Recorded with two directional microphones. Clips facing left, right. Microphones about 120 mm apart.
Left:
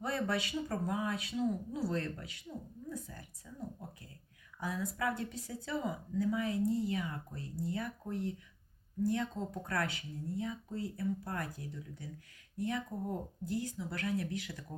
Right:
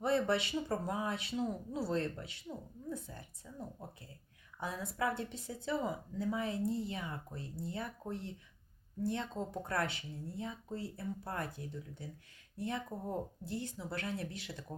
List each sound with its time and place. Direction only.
0.0 s speech: 25° right (ahead or behind)
4.6 s speech: 25° right (ahead or behind)